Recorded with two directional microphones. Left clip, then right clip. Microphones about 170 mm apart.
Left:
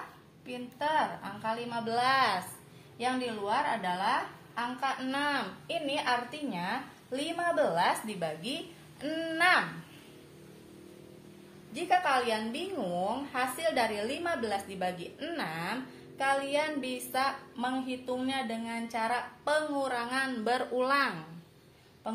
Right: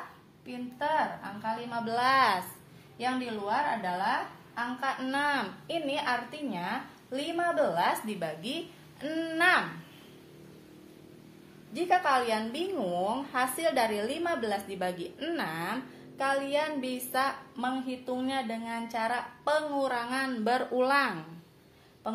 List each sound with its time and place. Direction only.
0.5 s a woman's voice: 10° right (ahead or behind)
1.9 s a woman's voice: 30° right (ahead or behind)
3.4 s a woman's voice: 15° right (ahead or behind)
5.1 s a woman's voice: 35° right (ahead or behind)
11.7 s a woman's voice: 35° right (ahead or behind)